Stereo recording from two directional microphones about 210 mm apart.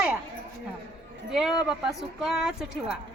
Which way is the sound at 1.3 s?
Centre (ahead or behind).